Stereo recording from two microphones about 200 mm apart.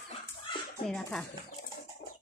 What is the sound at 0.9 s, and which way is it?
Speech, 5° left (ahead or behind).